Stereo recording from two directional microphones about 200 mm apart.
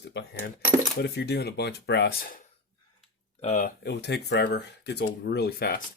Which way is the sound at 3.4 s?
35° left (ahead or behind).